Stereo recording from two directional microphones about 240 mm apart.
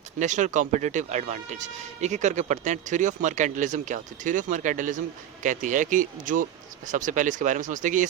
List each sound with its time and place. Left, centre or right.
0.2 s speech: right